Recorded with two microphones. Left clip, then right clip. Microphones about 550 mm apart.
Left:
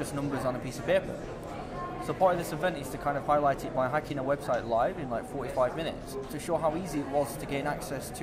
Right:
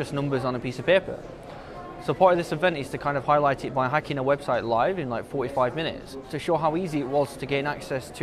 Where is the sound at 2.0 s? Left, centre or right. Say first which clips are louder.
Right 7 dB; right.